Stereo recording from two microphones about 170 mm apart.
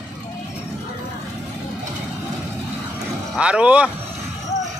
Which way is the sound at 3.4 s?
5° right (ahead or behind).